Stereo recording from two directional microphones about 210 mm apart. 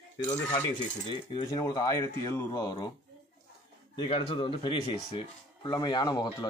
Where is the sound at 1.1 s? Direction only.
20° left (ahead or behind).